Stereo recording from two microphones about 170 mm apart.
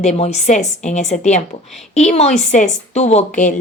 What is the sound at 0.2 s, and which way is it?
A woman's voice, 40° left (ahead or behind).